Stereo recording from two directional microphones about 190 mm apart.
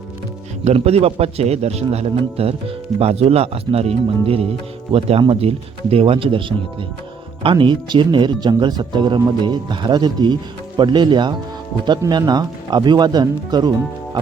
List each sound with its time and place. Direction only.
0.6 s speech: 35° right (ahead or behind)
7.4 s speech: 25° right (ahead or behind)